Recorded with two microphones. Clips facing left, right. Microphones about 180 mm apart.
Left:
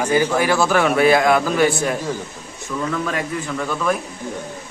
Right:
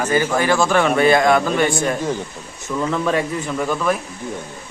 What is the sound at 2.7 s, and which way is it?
A man's voice, 20° right (ahead or behind).